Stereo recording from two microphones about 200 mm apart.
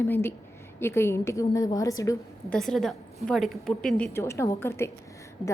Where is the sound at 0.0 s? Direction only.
10° left (ahead or behind).